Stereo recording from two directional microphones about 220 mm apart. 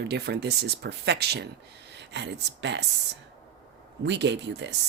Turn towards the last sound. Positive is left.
turn(degrees=-55)  # may be behind; listen again after turning